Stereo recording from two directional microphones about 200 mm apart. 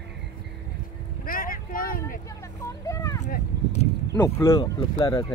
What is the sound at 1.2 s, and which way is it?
Vehicle, 45° left (ahead or behind).